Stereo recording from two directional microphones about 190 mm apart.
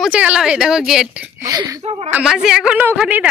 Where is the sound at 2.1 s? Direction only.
5° right (ahead or behind).